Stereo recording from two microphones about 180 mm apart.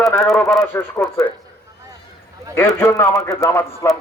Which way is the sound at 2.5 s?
15° left (ahead or behind).